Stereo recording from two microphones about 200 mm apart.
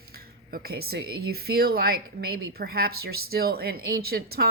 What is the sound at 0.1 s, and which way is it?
Speech, 50° right (ahead or behind).